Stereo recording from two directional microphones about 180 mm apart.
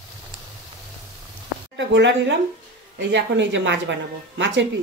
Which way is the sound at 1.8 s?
80° right.